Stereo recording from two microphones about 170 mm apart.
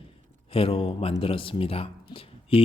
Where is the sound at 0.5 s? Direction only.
35° left (ahead or behind).